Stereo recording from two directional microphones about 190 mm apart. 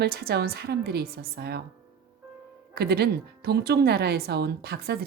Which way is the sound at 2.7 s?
60° right (ahead or behind).